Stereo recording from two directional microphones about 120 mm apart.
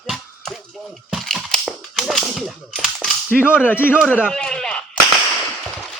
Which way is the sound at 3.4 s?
10° right (ahead or behind).